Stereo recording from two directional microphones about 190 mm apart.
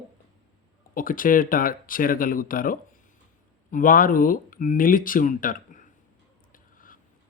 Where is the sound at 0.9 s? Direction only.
45° left (ahead or behind).